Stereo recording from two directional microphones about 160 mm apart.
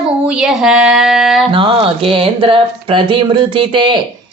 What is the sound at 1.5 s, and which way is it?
Speech, 35° right (ahead or behind).